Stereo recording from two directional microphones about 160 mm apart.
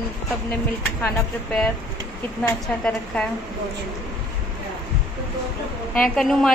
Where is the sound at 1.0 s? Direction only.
10° left (ahead or behind).